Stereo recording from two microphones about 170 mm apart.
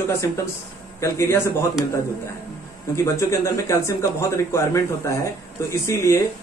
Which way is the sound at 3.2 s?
15° left (ahead or behind).